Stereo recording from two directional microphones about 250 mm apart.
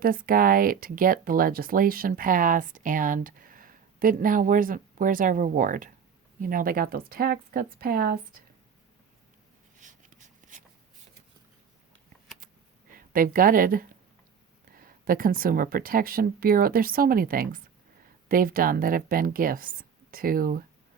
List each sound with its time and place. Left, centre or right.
0.0 s speech: right
9.7 s a sound: right
12.9 s speech: right